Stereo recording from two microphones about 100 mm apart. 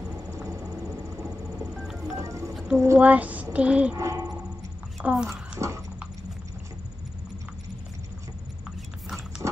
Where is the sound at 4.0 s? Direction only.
30° right (ahead or behind).